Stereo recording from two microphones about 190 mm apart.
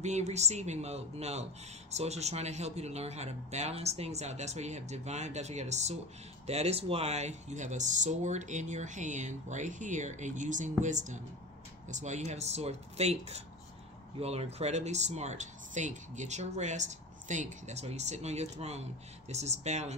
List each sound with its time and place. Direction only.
0.0 s speech: 35° right (ahead or behind)